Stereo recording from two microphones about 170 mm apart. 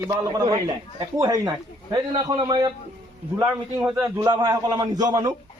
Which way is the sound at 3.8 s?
10° right (ahead or behind).